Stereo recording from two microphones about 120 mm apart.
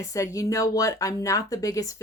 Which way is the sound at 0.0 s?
25° left (ahead or behind).